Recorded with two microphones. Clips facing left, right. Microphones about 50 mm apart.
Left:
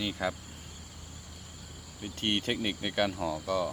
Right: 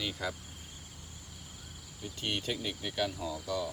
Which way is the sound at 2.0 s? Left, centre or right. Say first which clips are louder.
Left 4 dB; left.